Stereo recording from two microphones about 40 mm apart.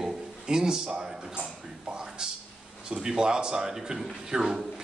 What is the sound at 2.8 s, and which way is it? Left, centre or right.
Speech, centre.